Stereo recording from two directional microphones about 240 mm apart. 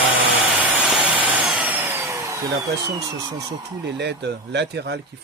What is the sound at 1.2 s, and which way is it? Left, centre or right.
Power tool, centre.